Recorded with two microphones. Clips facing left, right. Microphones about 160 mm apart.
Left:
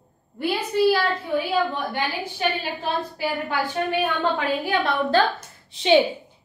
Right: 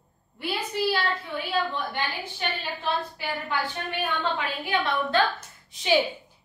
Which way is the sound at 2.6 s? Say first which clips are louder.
Left 2 dB; 45° left (ahead or behind).